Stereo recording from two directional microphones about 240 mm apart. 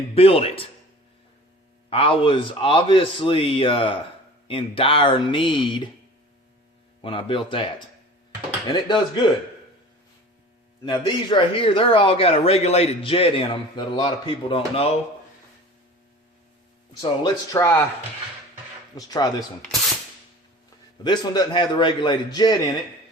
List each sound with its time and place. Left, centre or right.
0.1 s speech: left
1.9 s speech: left
7.0 s speech: left
8.7 s speech: centre
10.8 s speech: centre
17.0 s a man's voice: centre
18.9 s a man's voice: centre
21.0 s a man's voice: centre